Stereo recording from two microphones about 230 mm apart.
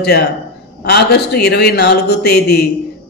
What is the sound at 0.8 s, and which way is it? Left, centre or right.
A man's voice, left.